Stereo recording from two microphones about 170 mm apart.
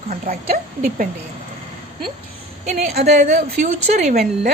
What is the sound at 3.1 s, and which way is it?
A woman's voice, 40° right (ahead or behind).